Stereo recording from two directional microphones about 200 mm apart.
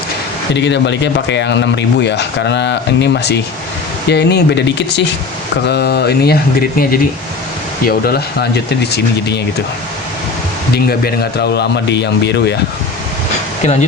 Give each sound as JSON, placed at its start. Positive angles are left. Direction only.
{"t": 0.5, "sound": "speech", "side_deg": 60}
{"t": 10.8, "sound": "speech", "side_deg": 55}